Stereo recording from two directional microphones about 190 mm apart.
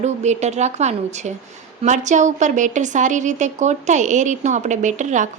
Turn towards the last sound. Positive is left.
turn(degrees=-40)  # may be behind; listen again after turning